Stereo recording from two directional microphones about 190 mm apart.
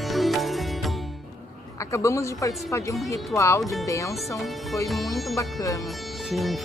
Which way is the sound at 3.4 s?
15° left (ahead or behind).